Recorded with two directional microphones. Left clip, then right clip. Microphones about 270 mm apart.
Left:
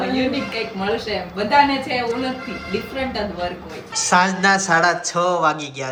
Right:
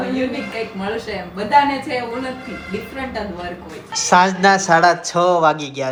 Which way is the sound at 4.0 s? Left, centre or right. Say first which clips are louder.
Right 3 dB; centre.